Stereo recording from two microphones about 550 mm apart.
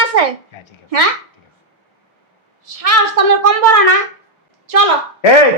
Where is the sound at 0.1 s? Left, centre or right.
Right.